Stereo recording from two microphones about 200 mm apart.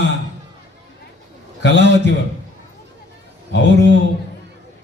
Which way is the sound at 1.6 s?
60° left (ahead or behind).